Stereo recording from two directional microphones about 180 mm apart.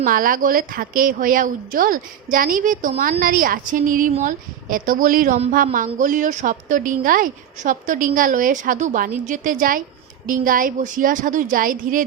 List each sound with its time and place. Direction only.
0.0 s a woman's voice: 50° right (ahead or behind)